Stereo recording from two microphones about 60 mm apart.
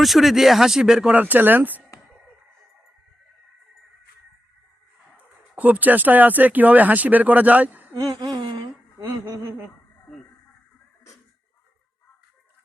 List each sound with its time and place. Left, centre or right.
0.0 s speech: centre
1.1 s speech: right
5.1 s speech: right
7.9 s a sound: right